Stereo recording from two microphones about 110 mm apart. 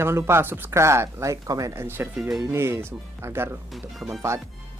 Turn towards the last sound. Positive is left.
turn(degrees=-25)  # may be behind; listen again after turning